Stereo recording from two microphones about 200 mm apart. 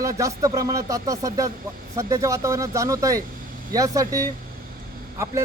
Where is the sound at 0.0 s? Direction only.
15° right (ahead or behind).